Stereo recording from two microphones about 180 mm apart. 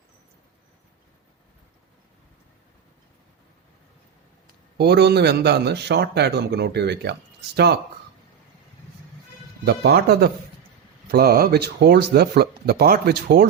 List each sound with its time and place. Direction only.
4.8 s a man's voice: 65° right (ahead or behind)
9.6 s speech: 65° right (ahead or behind)